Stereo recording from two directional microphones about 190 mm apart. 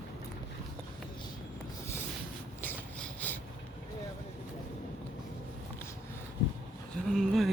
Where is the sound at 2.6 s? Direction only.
10° left (ahead or behind).